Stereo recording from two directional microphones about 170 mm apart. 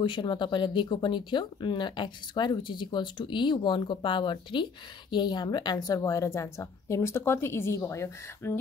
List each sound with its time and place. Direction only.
0.0 s a woman's voice: 25° left (ahead or behind)